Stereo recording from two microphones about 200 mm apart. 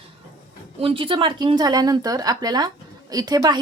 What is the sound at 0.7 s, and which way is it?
A woman's voice, 30° right (ahead or behind).